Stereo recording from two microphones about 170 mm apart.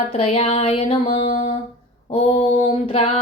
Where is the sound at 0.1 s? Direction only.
40° left (ahead or behind).